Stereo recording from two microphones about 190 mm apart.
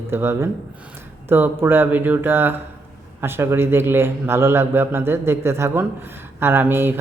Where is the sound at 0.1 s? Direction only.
10° right (ahead or behind).